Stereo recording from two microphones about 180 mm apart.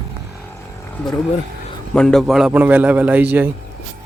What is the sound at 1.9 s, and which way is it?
A man's voice, 5° left (ahead or behind).